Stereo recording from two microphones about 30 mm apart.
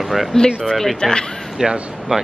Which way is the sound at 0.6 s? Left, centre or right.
Left.